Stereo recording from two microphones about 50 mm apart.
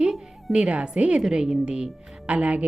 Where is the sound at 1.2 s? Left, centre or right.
Centre.